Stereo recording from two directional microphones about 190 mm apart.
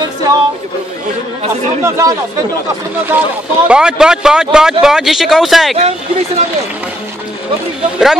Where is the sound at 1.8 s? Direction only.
15° right (ahead or behind).